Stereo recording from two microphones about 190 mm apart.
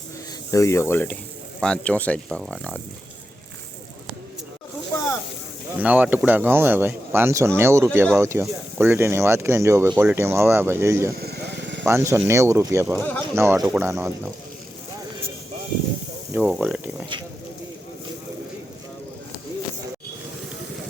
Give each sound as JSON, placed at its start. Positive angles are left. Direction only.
{"t": 0.5, "sound": "speech", "side_deg": 15}
{"t": 5.8, "sound": "speech", "side_deg": -10}
{"t": 11.2, "sound": "a sound", "side_deg": -65}
{"t": 11.8, "sound": "speech", "side_deg": -15}
{"t": 13.0, "sound": "speech", "side_deg": 10}
{"t": 13.3, "sound": "speech", "side_deg": -15}
{"t": 16.3, "sound": "speech", "side_deg": -5}